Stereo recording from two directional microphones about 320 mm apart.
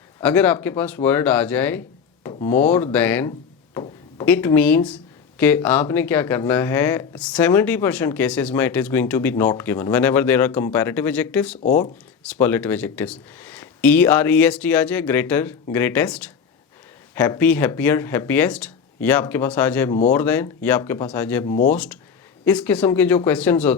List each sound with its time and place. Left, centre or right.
0.2 s speech: centre
21.4 s speech: left
21.7 s speech: centre